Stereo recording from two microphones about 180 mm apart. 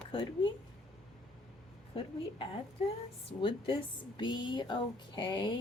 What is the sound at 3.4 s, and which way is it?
A woman's voice, 30° left (ahead or behind).